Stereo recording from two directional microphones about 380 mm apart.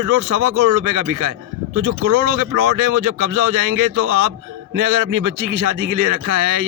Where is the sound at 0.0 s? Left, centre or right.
Right.